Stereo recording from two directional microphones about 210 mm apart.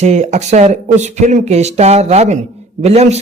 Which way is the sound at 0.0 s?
35° right (ahead or behind).